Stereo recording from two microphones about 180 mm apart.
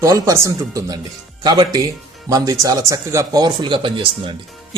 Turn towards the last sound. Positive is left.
turn(degrees=-25)  # may be behind; listen again after turning